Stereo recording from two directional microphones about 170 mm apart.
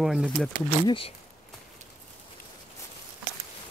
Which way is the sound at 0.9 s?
30° left (ahead or behind).